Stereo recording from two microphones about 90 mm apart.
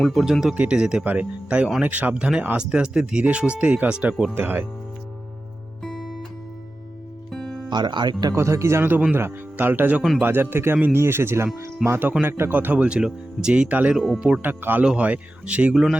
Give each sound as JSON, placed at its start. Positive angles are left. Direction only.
{"t": 0.0, "sound": "speech", "side_deg": 0}
{"t": 0.5, "sound": "a man's voice", "side_deg": -15}
{"t": 5.8, "sound": "music", "side_deg": 0}
{"t": 7.3, "sound": "music", "side_deg": 5}
{"t": 7.7, "sound": "speech", "side_deg": -55}
{"t": 8.4, "sound": "a man's voice", "side_deg": -30}
{"t": 13.9, "sound": "speech", "side_deg": 0}
{"t": 14.4, "sound": "a man's voice", "side_deg": -20}